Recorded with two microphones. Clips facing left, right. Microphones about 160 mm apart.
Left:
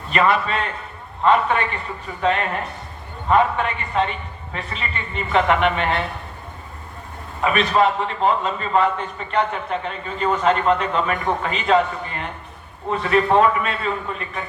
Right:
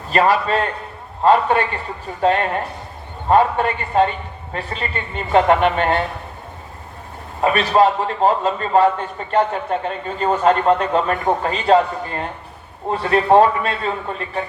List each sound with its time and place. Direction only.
0.1 s a man's voice: 35° right (ahead or behind)
7.4 s a man's voice: 35° right (ahead or behind)